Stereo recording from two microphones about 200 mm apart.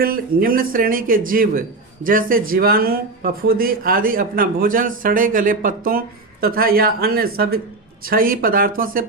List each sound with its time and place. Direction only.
0.0 s speech: 45° right (ahead or behind)